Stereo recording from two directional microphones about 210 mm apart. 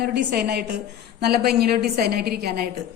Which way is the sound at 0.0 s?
50° right (ahead or behind).